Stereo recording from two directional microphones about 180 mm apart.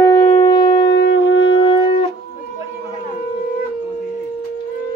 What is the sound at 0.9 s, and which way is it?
Shofar, 85° left.